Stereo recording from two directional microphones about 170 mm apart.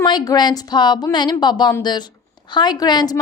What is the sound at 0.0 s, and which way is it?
A woman's voice, 25° left (ahead or behind).